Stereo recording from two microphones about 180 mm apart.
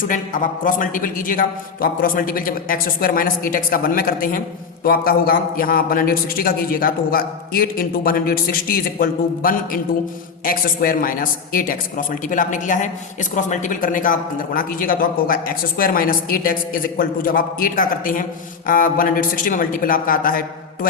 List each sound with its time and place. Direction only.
0.6 s a man's voice: 50° left (ahead or behind)